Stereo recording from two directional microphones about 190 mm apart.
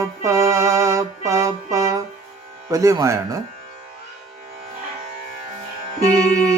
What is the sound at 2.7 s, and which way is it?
Speech, 15° right (ahead or behind).